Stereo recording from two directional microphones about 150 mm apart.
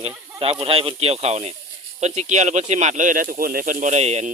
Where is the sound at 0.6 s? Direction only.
40° right (ahead or behind).